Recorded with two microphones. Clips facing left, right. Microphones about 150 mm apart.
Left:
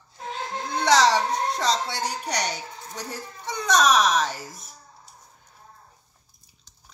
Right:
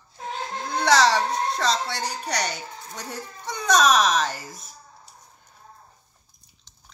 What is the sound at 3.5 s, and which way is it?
Speech, centre (ahead or behind).